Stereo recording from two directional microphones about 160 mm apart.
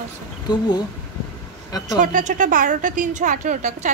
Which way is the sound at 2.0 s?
55° right (ahead or behind).